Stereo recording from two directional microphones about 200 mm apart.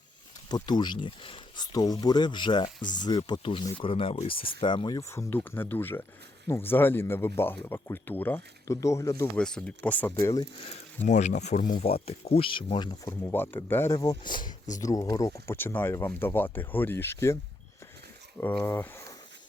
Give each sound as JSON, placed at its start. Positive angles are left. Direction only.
{"t": 0.4, "sound": "speech", "side_deg": 20}
{"t": 9.4, "sound": "speech", "side_deg": 5}
{"t": 10.2, "sound": "speech", "side_deg": 20}
{"t": 11.0, "sound": "speech", "side_deg": 35}
{"t": 18.6, "sound": "speech", "side_deg": 10}